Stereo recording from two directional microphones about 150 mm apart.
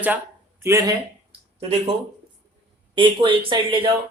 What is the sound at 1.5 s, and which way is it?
Speech, 45° right (ahead or behind).